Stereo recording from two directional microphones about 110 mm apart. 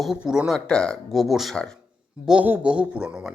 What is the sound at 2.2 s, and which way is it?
Speech, 10° right (ahead or behind).